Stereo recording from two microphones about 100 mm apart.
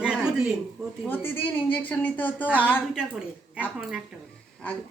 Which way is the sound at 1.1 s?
20° left (ahead or behind).